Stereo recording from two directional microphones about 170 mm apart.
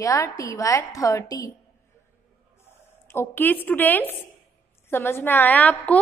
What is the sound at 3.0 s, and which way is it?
A woman's voice, 15° left (ahead or behind).